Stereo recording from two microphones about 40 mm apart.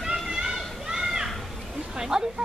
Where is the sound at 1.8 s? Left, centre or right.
Centre.